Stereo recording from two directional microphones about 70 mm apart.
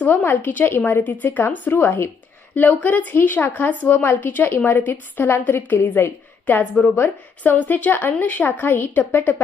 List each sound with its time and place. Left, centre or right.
0.3 s a woman's voice: left
2.6 s a woman's voice: left
6.4 s a woman's voice: left